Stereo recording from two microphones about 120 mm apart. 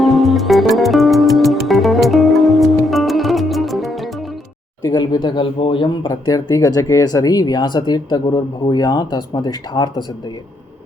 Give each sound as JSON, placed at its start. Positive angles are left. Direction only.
{"t": 0.0, "sound": "music", "side_deg": 0}
{"t": 4.9, "sound": "speech", "side_deg": 40}